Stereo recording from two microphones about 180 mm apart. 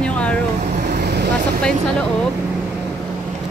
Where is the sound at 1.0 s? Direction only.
65° right (ahead or behind).